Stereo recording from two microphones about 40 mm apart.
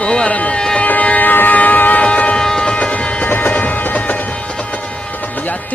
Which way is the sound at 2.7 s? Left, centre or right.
Left.